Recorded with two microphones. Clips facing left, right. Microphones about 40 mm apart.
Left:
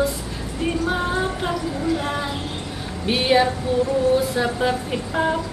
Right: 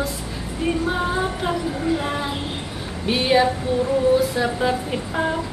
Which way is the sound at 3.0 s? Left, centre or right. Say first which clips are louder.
Even; centre.